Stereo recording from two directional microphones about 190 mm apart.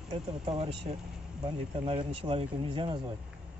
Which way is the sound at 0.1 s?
30° right (ahead or behind).